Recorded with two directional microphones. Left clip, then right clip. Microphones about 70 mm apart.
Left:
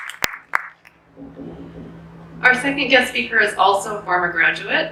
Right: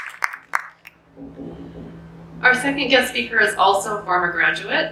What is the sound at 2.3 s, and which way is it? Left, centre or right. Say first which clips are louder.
A woman's voice: left 1 dB; centre.